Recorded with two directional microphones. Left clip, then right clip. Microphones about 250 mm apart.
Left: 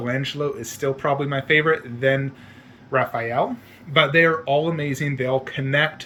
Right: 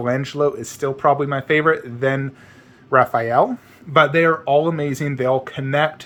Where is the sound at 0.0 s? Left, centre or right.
Centre.